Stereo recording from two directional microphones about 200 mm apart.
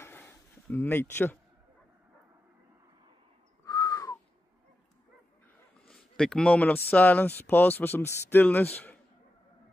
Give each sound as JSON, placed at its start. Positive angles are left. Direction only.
{"t": 0.0, "sound": "a sound", "side_deg": 10}
{"t": 3.6, "sound": "crow", "side_deg": 15}
{"t": 5.9, "sound": "speech", "side_deg": 5}